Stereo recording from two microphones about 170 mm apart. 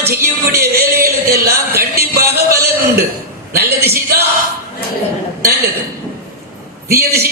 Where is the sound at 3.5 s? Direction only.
70° right (ahead or behind).